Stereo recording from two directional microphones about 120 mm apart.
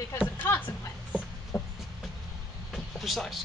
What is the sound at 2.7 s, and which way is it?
Vehicle, centre (ahead or behind).